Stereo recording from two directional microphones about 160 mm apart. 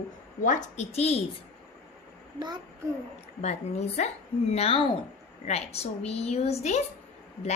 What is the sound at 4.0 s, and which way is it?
A woman's voice, 50° left (ahead or behind).